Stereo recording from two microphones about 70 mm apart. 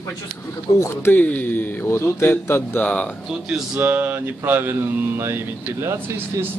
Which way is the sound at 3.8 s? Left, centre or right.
Right.